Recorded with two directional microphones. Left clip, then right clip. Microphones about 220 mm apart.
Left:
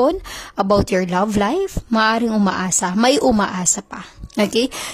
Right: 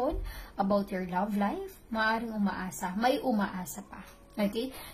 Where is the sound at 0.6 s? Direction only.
45° left (ahead or behind).